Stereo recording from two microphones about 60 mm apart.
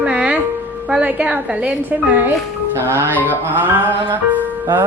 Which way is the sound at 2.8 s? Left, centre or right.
Right.